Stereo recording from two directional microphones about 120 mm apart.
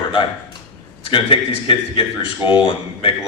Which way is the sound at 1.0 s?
45° left (ahead or behind).